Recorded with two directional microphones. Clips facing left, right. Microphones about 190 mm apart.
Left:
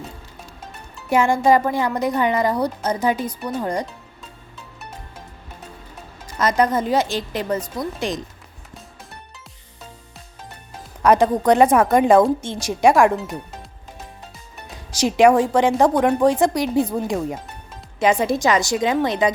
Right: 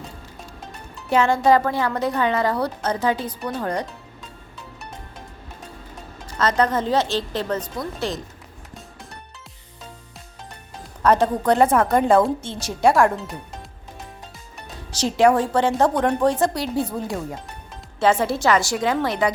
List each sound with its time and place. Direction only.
1.1 s a woman's voice: 10° left (ahead or behind)
6.2 s a woman's voice: 10° left (ahead or behind)
11.0 s a woman's voice: 10° left (ahead or behind)
14.9 s a woman's voice: 15° left (ahead or behind)